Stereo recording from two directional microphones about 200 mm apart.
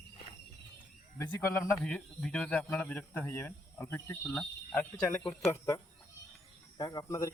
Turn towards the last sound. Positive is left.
turn(degrees=15)  # may be behind; listen again after turning